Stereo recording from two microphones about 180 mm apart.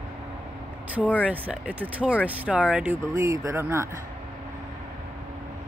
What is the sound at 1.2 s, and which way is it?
Speech, 5° right (ahead or behind).